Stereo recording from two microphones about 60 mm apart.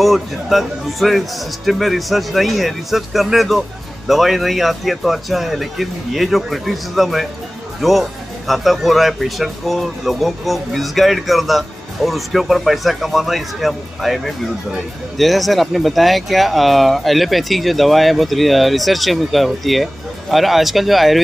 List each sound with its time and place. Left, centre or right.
0.0 s speech: centre